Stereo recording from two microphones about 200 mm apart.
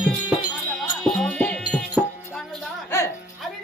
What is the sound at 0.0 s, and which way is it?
Music, centre (ahead or behind).